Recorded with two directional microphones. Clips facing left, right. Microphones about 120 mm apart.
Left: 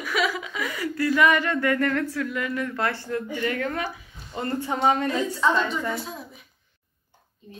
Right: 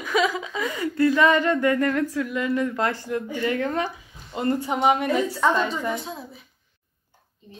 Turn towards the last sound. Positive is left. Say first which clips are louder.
# right 1 dB
turn(degrees=-20)  # may be behind; listen again after turning